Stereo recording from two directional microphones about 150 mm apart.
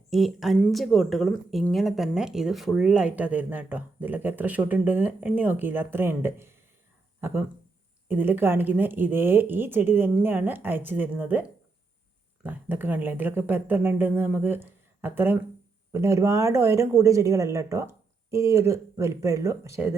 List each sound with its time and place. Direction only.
0.1 s speech: centre (ahead or behind); by 20.0 s 20° right (ahead or behind)